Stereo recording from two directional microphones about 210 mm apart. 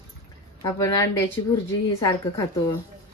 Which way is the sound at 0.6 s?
15° left (ahead or behind).